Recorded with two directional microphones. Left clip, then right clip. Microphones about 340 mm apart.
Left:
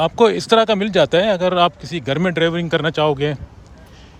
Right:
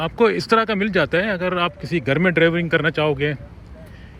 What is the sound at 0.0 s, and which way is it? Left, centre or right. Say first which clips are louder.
Speech: left 4 dB; centre.